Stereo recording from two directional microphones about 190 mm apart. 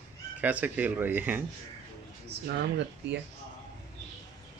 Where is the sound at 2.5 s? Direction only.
60° right (ahead or behind).